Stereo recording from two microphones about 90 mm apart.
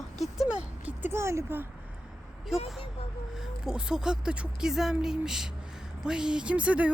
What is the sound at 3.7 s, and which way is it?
Speech, 10° right (ahead or behind).